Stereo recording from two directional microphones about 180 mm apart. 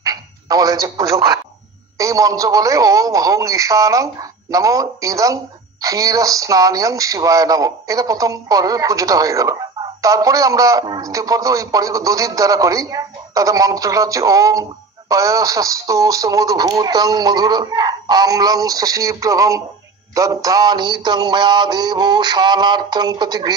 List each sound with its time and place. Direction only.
0.0 s telephone: 20° right (ahead or behind)
2.0 s speech: 20° right (ahead or behind)